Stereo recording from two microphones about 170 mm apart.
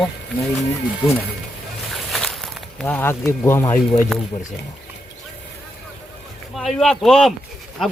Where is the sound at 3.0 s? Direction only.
15° left (ahead or behind).